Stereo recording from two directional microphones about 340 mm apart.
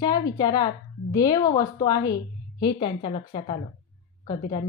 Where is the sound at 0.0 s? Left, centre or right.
Centre.